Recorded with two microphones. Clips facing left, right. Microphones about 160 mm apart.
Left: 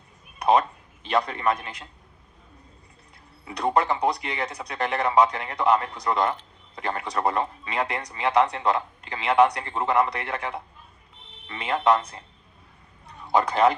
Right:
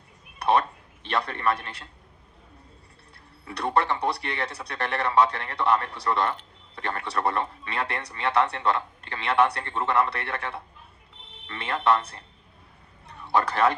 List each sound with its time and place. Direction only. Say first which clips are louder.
1.1 s a man's voice: left 3 dB; 15° left (ahead or behind)
3.4 s a man's voice: left 2 dB; 15° left (ahead or behind)
13.3 s a man's voice: left 3 dB; 15° left (ahead or behind)